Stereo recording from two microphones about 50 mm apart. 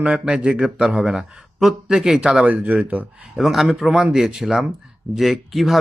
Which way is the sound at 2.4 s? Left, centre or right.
Right.